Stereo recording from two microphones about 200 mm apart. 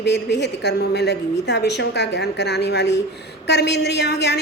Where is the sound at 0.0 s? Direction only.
60° left (ahead or behind).